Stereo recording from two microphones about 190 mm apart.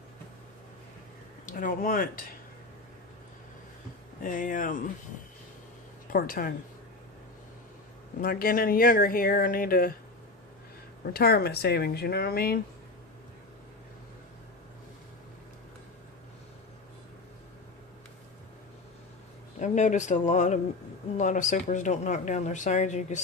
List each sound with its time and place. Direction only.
1.5 s speech: 45° left (ahead or behind)
4.2 s speech: 45° left (ahead or behind)
6.1 s speech: 50° left (ahead or behind)
8.2 s speech: 50° left (ahead or behind)
11.0 s speech: 55° left (ahead or behind)
19.5 s speech: 40° left (ahead or behind)